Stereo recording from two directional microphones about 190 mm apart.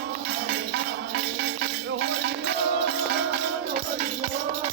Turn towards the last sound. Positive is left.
turn(degrees=-60)  # may be behind; listen again after turning